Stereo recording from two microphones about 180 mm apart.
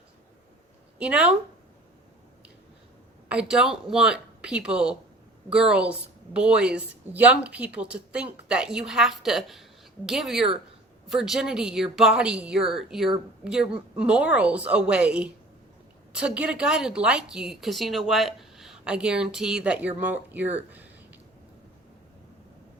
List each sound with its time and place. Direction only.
0.9 s a woman's voice: 5° right (ahead or behind)
3.2 s a woman's voice: 5° right (ahead or behind)